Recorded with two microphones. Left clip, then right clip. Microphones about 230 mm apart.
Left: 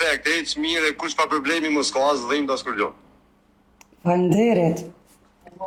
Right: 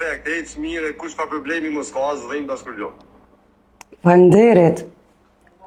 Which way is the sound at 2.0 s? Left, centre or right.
Left.